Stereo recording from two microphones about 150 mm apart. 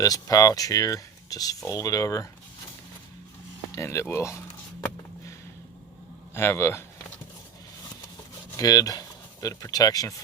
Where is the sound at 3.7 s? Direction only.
20° left (ahead or behind).